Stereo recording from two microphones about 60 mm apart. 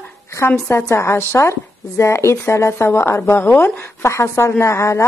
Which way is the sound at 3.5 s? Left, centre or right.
Left.